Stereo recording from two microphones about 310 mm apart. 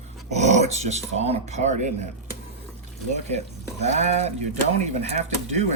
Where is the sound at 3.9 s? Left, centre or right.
Right.